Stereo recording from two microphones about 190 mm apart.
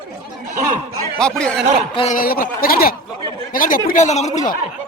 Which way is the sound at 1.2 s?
5° left (ahead or behind).